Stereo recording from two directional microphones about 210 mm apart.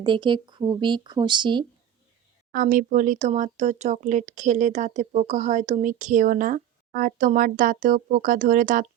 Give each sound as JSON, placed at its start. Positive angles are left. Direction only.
{"t": 0.0, "sound": "speech", "side_deg": -20}
{"t": 2.5, "sound": "speech", "side_deg": -40}